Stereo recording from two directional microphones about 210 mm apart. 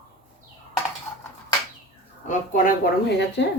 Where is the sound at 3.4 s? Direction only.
55° left (ahead or behind).